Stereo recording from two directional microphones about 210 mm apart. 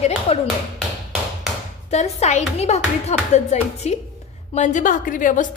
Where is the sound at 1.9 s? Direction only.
35° left (ahead or behind).